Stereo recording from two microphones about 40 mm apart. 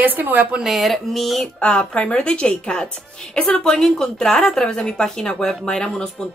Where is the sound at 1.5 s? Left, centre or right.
Left.